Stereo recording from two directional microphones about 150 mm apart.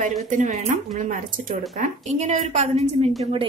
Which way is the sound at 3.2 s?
35° right (ahead or behind).